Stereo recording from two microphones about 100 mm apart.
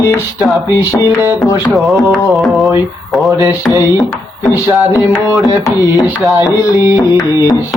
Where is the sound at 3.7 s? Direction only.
30° right (ahead or behind).